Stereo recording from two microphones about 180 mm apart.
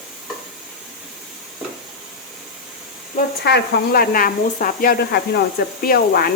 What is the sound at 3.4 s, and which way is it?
Speech, 60° left (ahead or behind).